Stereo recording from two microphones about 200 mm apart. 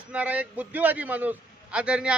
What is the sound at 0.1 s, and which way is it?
A man's voice, 5° right (ahead or behind).